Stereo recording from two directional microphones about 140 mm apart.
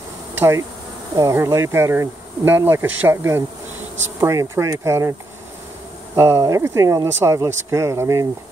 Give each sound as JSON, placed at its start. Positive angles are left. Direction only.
{"t": 0.3, "sound": "speech", "side_deg": -15}
{"t": 6.1, "sound": "speech", "side_deg": -20}